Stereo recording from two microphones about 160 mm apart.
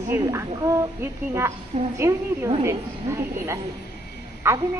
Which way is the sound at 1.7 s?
45° right (ahead or behind).